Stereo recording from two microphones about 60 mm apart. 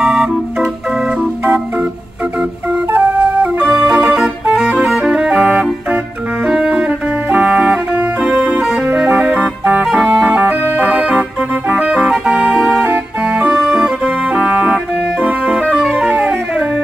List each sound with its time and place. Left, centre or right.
0.0 s organ: centre
2.9 s music: right
10.8 s organ: right
11.7 s music: centre
13.2 s organ: centre
15.6 s music: centre